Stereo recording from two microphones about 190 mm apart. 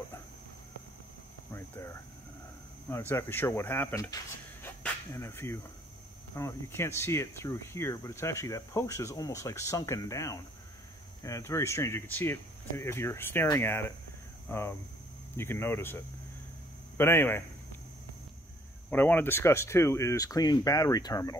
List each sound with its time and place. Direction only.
1.5 s a sound: 15° left (ahead or behind)
2.9 s a man's voice: 10° left (ahead or behind)
18.9 s speech: 10° left (ahead or behind)